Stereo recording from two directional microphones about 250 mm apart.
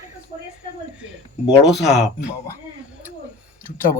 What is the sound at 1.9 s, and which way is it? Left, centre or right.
Speech, left.